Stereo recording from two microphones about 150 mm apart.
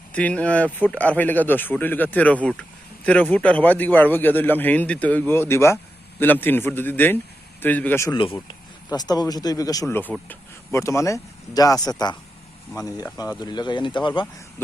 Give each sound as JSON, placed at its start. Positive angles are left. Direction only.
{"t": 0.1, "sound": "a man's voice", "side_deg": 10}
{"t": 8.1, "sound": "a man's voice", "side_deg": 35}